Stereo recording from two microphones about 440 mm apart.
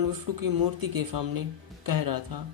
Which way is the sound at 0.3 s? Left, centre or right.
Right.